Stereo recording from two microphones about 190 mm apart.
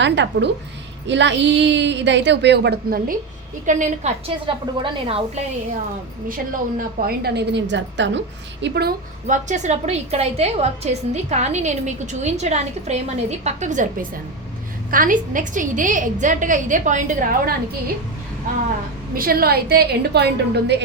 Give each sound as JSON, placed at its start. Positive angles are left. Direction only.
{"t": 0.0, "sound": "a woman's voice", "side_deg": -65}
{"t": 3.7, "sound": "a woman's voice", "side_deg": -40}
{"t": 4.4, "sound": "a woman's voice", "side_deg": -30}
{"t": 6.2, "sound": "a woman's voice", "side_deg": -45}
{"t": 9.2, "sound": "a woman's voice", "side_deg": -40}
{"t": 19.1, "sound": "a woman's voice", "side_deg": -50}